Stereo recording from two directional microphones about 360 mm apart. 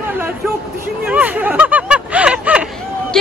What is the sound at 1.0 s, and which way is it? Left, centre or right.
Hubbub, centre.